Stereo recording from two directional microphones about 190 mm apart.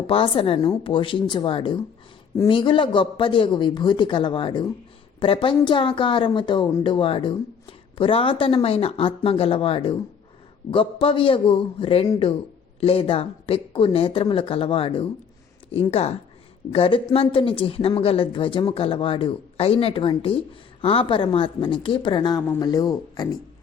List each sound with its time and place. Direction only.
0.1 s a woman's voice: 30° left (ahead or behind)